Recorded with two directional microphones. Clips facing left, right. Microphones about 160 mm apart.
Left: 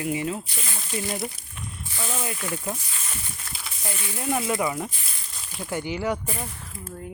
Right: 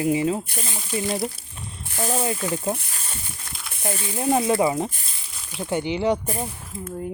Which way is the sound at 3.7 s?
55° right (ahead or behind).